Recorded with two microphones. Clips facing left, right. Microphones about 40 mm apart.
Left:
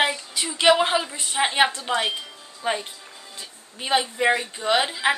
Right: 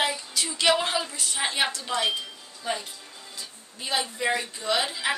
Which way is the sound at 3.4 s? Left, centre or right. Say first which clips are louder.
Left 4 dB; left.